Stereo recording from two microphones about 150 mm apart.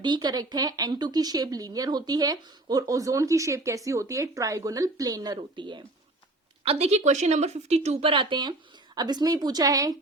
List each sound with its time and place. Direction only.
0.0 s speech: 30° right (ahead or behind)
6.6 s a woman's voice: 40° right (ahead or behind); by 9.9 s 25° right (ahead or behind)